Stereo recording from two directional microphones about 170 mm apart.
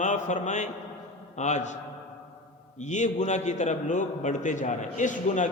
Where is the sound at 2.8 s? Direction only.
45° left (ahead or behind).